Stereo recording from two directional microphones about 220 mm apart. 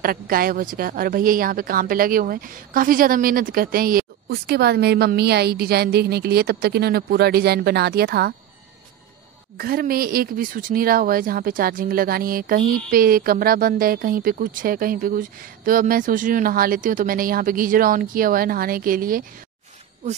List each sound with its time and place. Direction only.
0.0 s speech: 40° right (ahead or behind)
9.6 s a woman's voice: 45° right (ahead or behind)